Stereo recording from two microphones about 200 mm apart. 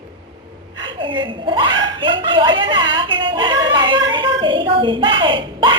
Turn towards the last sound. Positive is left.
turn(degrees=-25)  # may be behind; listen again after turning